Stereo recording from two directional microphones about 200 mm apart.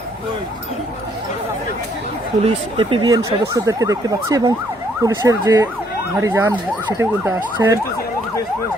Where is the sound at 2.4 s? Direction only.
25° right (ahead or behind); by 7.7 s 10° right (ahead or behind).